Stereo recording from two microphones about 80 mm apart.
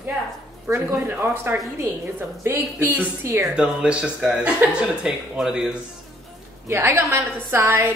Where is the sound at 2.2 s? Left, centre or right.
Right.